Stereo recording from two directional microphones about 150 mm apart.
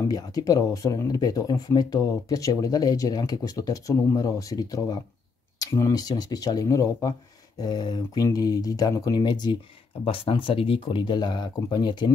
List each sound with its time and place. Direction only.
0.1 s speech: 25° left (ahead or behind)